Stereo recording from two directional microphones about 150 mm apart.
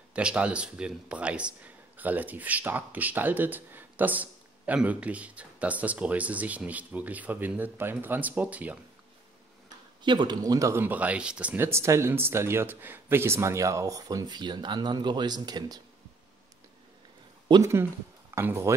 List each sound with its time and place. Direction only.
0.1 s speech: 5° right (ahead or behind)
9.7 s speech: 30° right (ahead or behind)
17.5 s speech: 20° right (ahead or behind)